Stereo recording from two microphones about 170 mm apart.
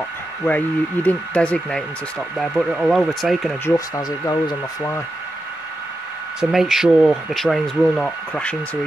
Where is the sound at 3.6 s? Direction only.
20° left (ahead or behind).